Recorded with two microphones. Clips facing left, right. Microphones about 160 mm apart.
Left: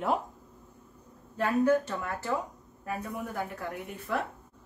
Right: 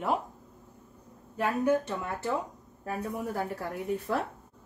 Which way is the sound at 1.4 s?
20° right (ahead or behind).